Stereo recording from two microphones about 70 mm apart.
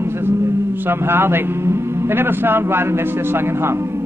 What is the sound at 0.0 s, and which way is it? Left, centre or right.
A man's voice, right.